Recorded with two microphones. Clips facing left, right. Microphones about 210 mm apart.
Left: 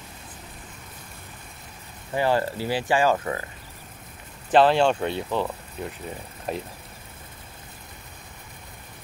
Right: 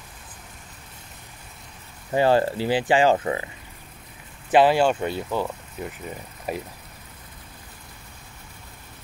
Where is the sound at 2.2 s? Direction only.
25° right (ahead or behind).